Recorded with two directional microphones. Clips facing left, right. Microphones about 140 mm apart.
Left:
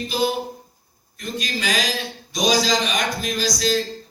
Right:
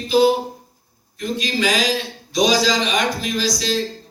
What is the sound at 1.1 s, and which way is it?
Speech, 45° left (ahead or behind).